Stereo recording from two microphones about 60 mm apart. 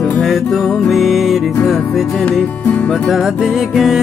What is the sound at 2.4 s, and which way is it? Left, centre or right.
Music, left.